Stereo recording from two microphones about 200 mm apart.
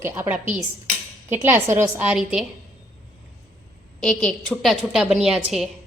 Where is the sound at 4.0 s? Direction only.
Centre (ahead or behind).